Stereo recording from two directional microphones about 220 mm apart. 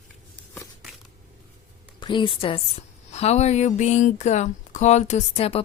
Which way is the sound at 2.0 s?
20° left (ahead or behind).